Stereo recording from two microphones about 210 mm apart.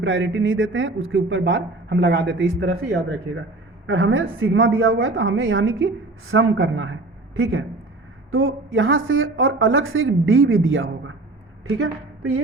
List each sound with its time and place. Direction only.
0.0 s a woman's voice: 65° right (ahead or behind)
11.8 s a woman's voice: 90° right